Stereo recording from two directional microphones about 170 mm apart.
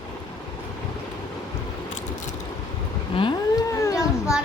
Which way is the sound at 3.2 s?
25° left (ahead or behind).